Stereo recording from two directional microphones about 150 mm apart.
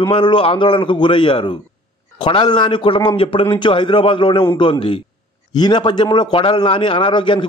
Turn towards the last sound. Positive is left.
turn(degrees=35)  # may be behind; listen again after turning